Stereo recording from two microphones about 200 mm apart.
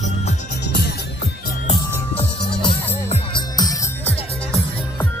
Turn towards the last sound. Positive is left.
turn(degrees=20)  # may be behind; listen again after turning